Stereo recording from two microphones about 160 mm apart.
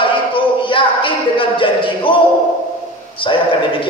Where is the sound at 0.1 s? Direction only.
30° left (ahead or behind).